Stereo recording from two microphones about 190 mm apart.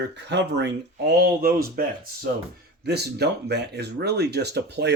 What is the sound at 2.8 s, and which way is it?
Speech, 60° right (ahead or behind).